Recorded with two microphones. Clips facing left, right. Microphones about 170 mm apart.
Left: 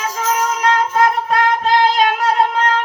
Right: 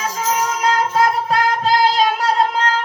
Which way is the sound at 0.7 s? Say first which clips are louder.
Left 1 dB; 35° right (ahead or behind).